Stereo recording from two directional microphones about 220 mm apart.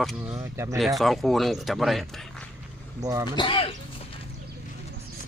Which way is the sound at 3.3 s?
25° left (ahead or behind).